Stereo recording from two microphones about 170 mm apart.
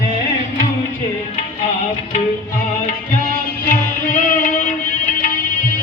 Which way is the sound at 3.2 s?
50° left (ahead or behind).